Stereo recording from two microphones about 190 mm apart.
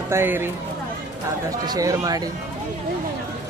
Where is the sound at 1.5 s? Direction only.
20° right (ahead or behind).